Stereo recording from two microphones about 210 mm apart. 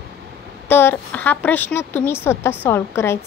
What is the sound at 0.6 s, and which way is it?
Speech, 10° left (ahead or behind).